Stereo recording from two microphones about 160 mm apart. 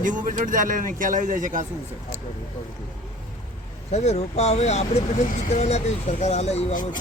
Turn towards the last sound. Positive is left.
turn(degrees=45)  # may be behind; listen again after turning